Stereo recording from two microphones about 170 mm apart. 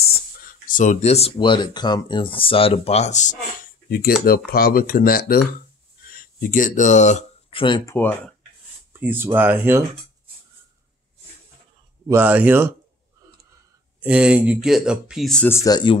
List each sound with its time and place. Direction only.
0.7 s speech: 50° left (ahead or behind)
4.5 s speech: 60° left (ahead or behind); by 7.8 s 30° left (ahead or behind)
7.8 s speech: 15° left (ahead or behind)
9.0 s speech: 10° right (ahead or behind)
12.1 s speech: 10° right (ahead or behind)
14.0 s speech: 5° right (ahead or behind)
15.5 s speech: 20° left (ahead or behind)